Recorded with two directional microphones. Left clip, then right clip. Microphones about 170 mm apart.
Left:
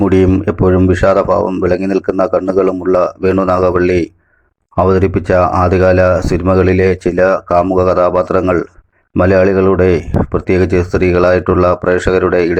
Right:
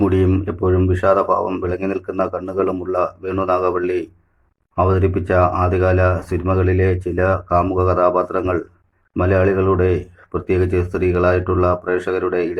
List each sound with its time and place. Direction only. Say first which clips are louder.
0.0 s speech: left 6 dB; 40° left (ahead or behind)